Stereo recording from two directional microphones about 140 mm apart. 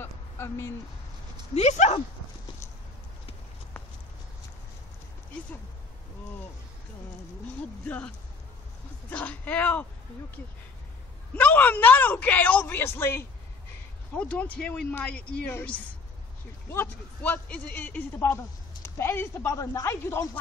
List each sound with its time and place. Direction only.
0.0 s a sound: 20° left (ahead or behind)
1.5 s speech: 50° left (ahead or behind)
9.1 s a man's voice: 10° left (ahead or behind)
11.3 s a man's voice: 10° left (ahead or behind)